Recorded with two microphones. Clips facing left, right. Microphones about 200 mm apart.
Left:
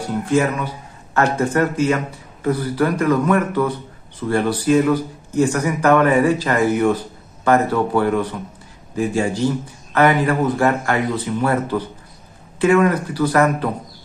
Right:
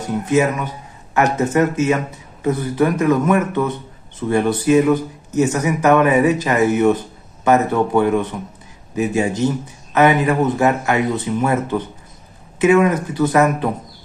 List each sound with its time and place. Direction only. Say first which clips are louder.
0.0 s speech: right 1 dB; 20° right (ahead or behind)